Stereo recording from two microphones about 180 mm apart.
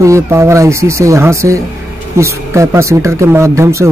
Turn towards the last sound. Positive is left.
turn(degrees=-15)  # may be behind; listen again after turning